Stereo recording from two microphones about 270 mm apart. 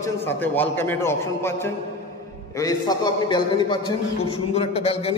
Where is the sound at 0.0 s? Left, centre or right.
Centre.